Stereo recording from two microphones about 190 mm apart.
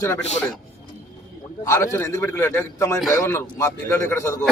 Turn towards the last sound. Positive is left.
turn(degrees=15)  # may be behind; listen again after turning